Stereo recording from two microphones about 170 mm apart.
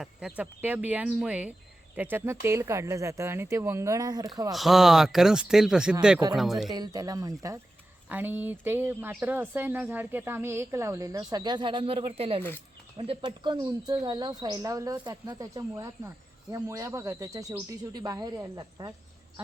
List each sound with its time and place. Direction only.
0.0 s speech: 5° right (ahead or behind); by 4.3 s 20° right (ahead or behind)
4.5 s speech: centre (ahead or behind)
6.7 s speech: 25° right (ahead or behind)